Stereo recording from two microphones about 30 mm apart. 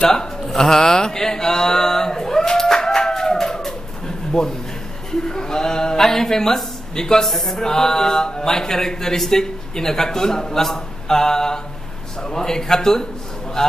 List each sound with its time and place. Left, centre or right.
0.0 s a man's voice: left
0.6 s a sound: centre
4.3 s a man's voice: left
5.2 s a sound: left
5.9 s speech: centre
7.2 s music: centre
7.5 s a man's voice: centre